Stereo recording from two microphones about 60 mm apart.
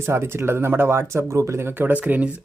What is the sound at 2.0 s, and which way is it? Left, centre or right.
Speech, centre.